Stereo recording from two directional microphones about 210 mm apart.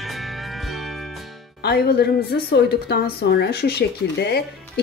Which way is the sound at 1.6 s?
50° left (ahead or behind).